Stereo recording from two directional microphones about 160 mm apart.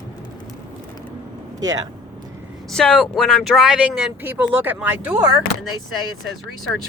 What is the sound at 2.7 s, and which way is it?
Speech, 5° left (ahead or behind).